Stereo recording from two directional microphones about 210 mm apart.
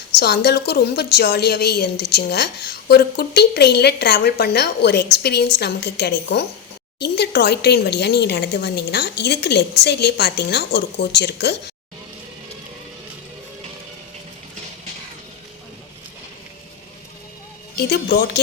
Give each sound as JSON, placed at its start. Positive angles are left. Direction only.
{"t": 0.1, "sound": "a woman's voice", "side_deg": 50}
{"t": 17.7, "sound": "a woman's voice", "side_deg": 50}